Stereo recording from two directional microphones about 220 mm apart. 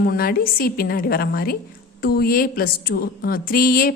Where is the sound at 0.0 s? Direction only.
40° left (ahead or behind).